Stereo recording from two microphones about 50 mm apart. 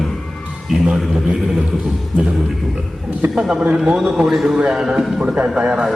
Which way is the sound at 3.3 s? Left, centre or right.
Centre.